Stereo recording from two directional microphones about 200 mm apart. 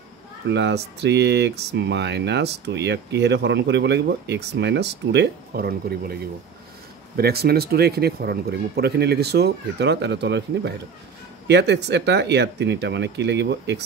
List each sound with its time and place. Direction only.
0.5 s speech: 60° right (ahead or behind)
7.2 s speech: 50° right (ahead or behind)